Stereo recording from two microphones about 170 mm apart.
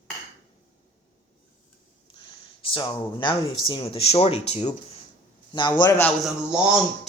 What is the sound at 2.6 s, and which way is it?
Speech, 30° left (ahead or behind).